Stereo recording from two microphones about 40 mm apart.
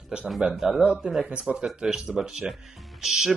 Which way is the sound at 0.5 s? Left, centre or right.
Centre.